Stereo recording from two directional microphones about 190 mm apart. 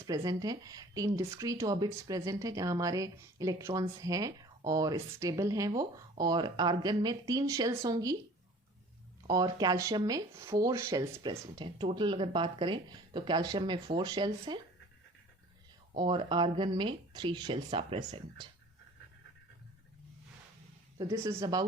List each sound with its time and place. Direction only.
0.0 s a woman's voice: 20° right (ahead or behind)
9.2 s a woman's voice: 20° right (ahead or behind)
16.0 s a woman's voice: 25° right (ahead or behind)
21.0 s a woman's voice: 20° right (ahead or behind)